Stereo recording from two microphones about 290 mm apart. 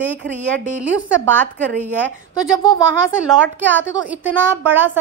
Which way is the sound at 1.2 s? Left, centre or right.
Centre.